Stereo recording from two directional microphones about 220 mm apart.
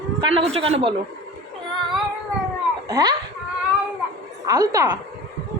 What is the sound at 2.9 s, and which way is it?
Speech, 15° right (ahead or behind).